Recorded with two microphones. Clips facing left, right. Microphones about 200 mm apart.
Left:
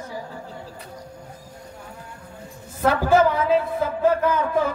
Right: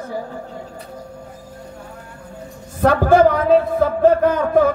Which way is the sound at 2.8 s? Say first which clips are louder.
Right 5 dB; 50° right (ahead or behind).